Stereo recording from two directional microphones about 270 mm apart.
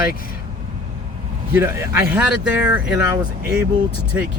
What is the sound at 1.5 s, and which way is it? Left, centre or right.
Speech, centre.